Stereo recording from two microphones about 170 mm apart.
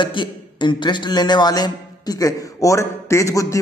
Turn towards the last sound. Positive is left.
turn(degrees=20)  # may be behind; listen again after turning